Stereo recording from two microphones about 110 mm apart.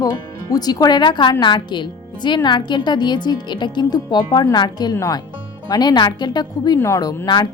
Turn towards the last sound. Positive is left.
turn(degrees=40)  # may be behind; listen again after turning